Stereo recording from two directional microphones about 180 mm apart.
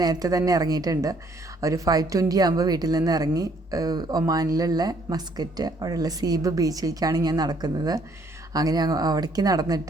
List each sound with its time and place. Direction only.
0.0 s a woman's voice: 20° right (ahead or behind)